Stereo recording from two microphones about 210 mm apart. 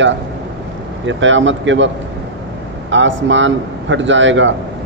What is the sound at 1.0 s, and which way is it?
Speech, 60° right (ahead or behind).